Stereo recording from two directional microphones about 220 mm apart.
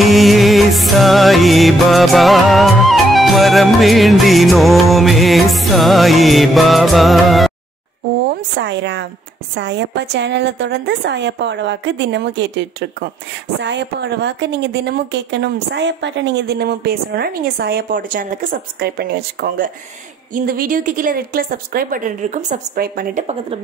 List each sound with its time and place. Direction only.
0.0 s music: centre (ahead or behind)
8.5 s a woman's voice: 55° right (ahead or behind); by 23.6 s 35° right (ahead or behind)